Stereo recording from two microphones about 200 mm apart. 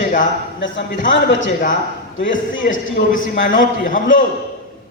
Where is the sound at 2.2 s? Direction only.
70° left (ahead or behind).